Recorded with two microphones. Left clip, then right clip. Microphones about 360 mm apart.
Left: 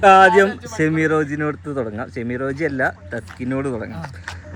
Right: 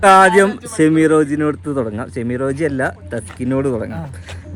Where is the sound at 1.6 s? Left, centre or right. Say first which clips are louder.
Right 4 dB; right.